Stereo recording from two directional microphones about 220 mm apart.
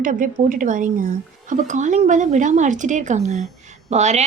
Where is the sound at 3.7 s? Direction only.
30° right (ahead or behind).